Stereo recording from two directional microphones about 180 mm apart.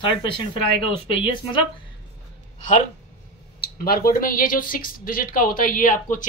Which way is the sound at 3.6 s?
55° left (ahead or behind).